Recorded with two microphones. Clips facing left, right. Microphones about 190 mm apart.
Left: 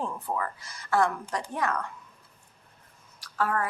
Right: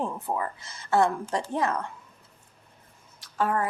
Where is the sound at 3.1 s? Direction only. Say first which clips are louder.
Right 2 dB; 20° right (ahead or behind).